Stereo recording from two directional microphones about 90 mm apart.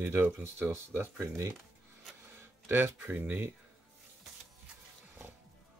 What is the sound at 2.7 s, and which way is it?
Speech, 25° right (ahead or behind).